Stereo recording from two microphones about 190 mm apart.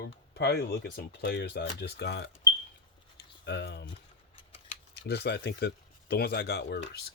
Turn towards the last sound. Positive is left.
turn(degrees=65)  # may be behind; listen again after turning